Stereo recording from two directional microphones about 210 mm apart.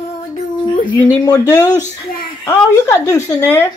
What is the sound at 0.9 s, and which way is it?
Speech, 15° left (ahead or behind).